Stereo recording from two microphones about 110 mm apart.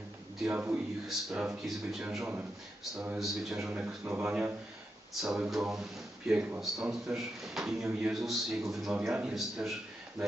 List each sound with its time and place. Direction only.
0.5 s a man's voice: 15° right (ahead or behind)
1.0 s a man's voice: 5° right (ahead or behind)
3.8 s speech: 20° right (ahead or behind)
5.2 s speech: 5° right (ahead or behind)